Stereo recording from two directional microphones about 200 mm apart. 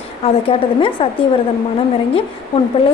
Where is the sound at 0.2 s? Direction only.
25° left (ahead or behind).